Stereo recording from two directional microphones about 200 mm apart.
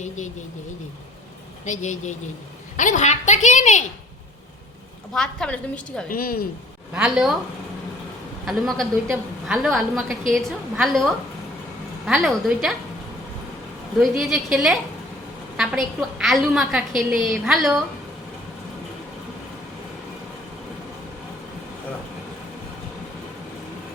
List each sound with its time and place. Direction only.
1.6 s a woman's voice: 40° left (ahead or behind)
5.1 s a woman's voice: 5° left (ahead or behind)
6.1 s speech: 45° left (ahead or behind)
6.9 s a woman's voice: centre (ahead or behind)
8.4 s a woman's voice: centre (ahead or behind)
14.0 s a woman's voice: centre (ahead or behind)